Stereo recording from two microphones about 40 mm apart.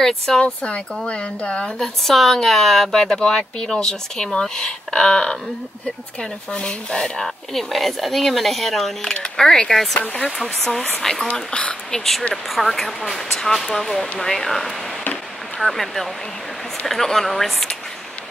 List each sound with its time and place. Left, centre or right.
0.4 s speech: left
1.8 s speech: centre
6.5 s speech: left; by 8.9 s centre
9.0 s speech: centre
11.9 s speech: centre